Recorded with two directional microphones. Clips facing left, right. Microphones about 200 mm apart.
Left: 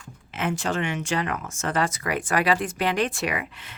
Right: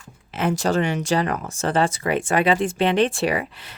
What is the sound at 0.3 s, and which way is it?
Speech, 40° right (ahead or behind).